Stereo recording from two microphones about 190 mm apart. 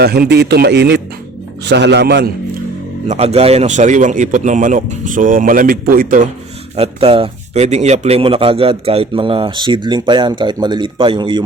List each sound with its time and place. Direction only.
0.0 s a man's voice: 55° right (ahead or behind)
3.1 s speech: 35° right (ahead or behind)
6.7 s speech: 30° right (ahead or behind)